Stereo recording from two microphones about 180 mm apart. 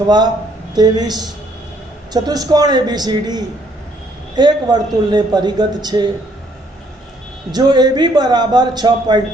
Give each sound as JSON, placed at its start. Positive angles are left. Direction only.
{"t": 0.7, "sound": "a man's voice", "side_deg": -20}
{"t": 7.5, "sound": "a man's voice", "side_deg": -25}